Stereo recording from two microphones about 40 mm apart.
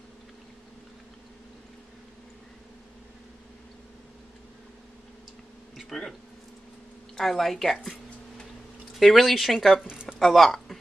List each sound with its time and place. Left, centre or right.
5.9 s speech: centre
7.2 s speech: centre
8.9 s speech: centre
9.8 s a sound: right
10.1 s speech: centre